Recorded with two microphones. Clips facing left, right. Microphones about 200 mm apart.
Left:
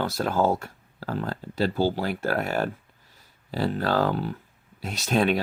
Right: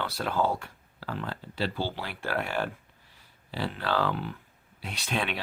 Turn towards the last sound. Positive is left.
turn(degrees=40)  # may be behind; listen again after turning